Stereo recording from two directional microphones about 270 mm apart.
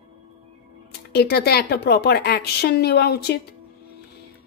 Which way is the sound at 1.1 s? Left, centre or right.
Left.